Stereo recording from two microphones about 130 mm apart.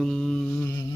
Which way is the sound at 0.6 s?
20° left (ahead or behind).